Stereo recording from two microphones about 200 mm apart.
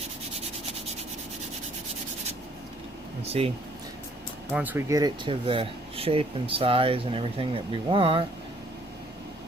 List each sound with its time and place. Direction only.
3.2 s speech: 30° right (ahead or behind)
4.5 s speech: 10° right (ahead or behind); by 8.2 s 25° right (ahead or behind)